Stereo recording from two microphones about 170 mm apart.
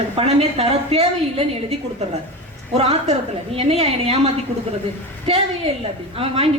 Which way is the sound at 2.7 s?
35° right (ahead or behind).